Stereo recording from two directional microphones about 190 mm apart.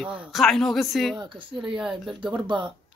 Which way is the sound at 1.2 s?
25° right (ahead or behind).